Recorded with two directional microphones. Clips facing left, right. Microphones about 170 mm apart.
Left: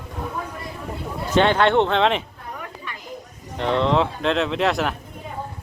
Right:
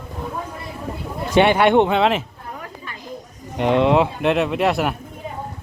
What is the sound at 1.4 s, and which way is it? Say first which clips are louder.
Speech: right 3 dB; 10° right (ahead or behind).